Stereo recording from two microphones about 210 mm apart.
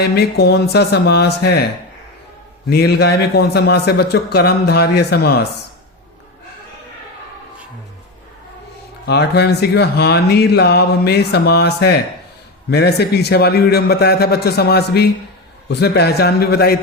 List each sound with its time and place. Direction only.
0.0 s speech: 50° left (ahead or behind)
2.6 s speech: 50° left (ahead or behind)
9.0 s speech: 50° left (ahead or behind)